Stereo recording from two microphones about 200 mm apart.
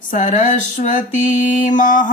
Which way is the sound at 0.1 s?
40° left (ahead or behind).